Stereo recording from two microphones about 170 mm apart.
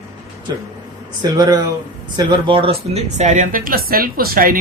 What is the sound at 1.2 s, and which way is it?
Speech, 25° right (ahead or behind).